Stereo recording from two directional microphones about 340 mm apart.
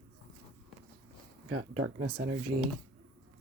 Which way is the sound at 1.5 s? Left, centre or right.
Right.